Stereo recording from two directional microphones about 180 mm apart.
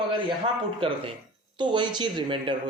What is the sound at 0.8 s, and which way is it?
A man's voice, 30° right (ahead or behind).